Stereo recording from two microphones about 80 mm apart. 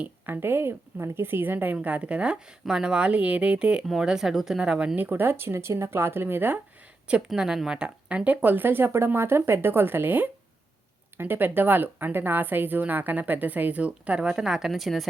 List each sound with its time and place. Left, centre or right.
0.0 s a woman's voice: right
4.9 s a woman's voice: right
7.3 s a woman's voice: centre